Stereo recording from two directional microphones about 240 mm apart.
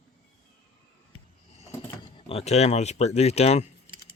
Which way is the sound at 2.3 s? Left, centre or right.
Left.